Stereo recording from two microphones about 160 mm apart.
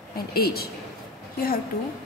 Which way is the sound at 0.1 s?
70° left (ahead or behind).